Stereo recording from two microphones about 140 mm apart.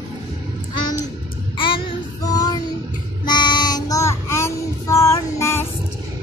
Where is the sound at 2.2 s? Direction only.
25° left (ahead or behind).